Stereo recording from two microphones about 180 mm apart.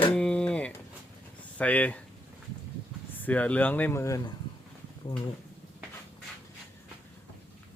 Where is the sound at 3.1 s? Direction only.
10° left (ahead or behind).